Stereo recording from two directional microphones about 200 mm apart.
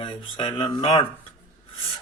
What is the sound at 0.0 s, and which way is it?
A man's voice, 20° left (ahead or behind).